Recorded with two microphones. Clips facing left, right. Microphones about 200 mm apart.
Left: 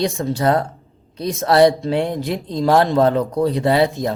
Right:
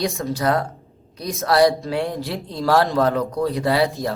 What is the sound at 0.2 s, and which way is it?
A man's voice, 25° left (ahead or behind).